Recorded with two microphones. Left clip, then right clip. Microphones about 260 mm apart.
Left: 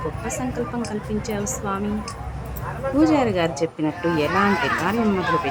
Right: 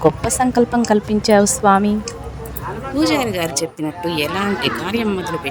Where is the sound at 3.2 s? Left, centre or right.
Centre.